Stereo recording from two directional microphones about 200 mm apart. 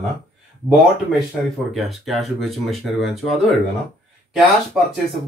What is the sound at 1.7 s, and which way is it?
Speech, centre (ahead or behind).